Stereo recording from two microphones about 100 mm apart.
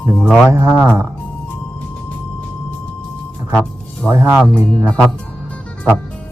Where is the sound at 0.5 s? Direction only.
25° right (ahead or behind).